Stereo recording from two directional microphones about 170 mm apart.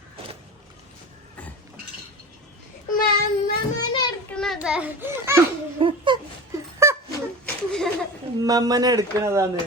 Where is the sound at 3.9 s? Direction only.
25° left (ahead or behind).